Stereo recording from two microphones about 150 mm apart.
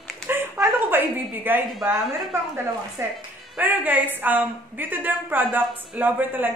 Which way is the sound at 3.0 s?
15° right (ahead or behind).